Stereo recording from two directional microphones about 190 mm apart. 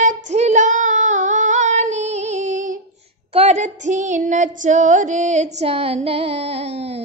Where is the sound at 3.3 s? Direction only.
35° right (ahead or behind).